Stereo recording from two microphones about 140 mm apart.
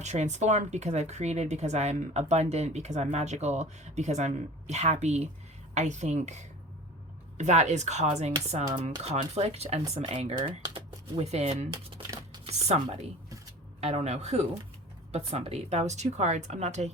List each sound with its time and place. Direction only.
0.0 s speech: 55° right (ahead or behind)